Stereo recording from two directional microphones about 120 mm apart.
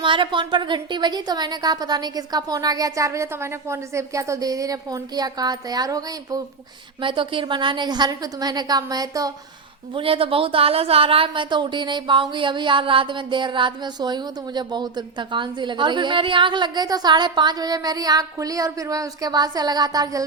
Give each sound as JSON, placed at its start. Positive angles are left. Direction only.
{"t": 0.0, "sound": "a woman's voice", "side_deg": -45}
{"t": 7.0, "sound": "a woman's voice", "side_deg": -45}
{"t": 9.9, "sound": "a woman's voice", "side_deg": -50}